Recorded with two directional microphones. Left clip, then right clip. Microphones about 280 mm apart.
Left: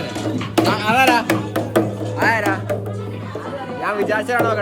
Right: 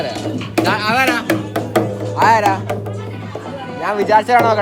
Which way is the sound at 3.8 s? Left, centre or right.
Centre.